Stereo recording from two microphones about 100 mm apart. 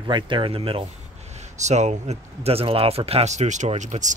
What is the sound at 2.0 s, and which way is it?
Speech, 85° right.